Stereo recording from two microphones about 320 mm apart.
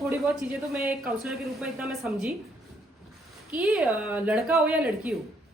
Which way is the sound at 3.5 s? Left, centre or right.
Centre.